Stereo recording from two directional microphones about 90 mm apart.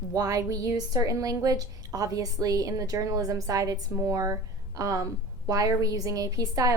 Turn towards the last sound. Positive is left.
turn(degrees=-40)  # may be behind; listen again after turning